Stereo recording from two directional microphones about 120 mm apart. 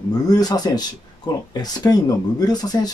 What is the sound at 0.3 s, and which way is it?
Speech, 35° left (ahead or behind).